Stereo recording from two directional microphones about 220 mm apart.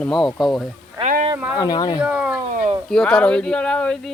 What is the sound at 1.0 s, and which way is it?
Speech, 40° right (ahead or behind).